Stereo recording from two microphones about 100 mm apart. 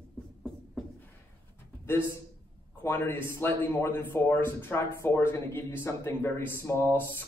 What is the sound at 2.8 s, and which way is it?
A man's voice, 25° left (ahead or behind).